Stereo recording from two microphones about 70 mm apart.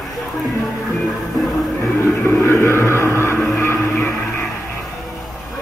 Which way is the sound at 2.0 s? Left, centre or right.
Left.